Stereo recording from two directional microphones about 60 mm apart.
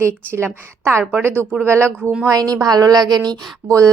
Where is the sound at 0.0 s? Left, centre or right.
Right.